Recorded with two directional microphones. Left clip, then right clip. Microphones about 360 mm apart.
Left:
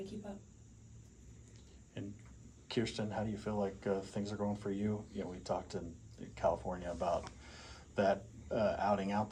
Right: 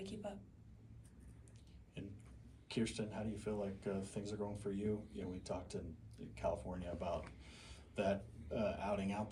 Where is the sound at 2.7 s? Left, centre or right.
Left.